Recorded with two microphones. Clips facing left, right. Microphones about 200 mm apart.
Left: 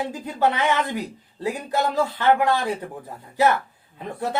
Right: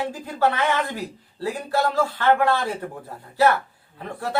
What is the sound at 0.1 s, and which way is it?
Speech, 20° left (ahead or behind).